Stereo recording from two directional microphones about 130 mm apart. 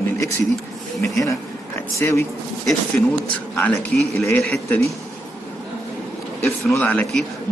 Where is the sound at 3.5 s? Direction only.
10° left (ahead or behind).